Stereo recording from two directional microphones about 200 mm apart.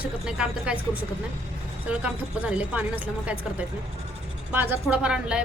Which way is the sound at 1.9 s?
5° right (ahead or behind).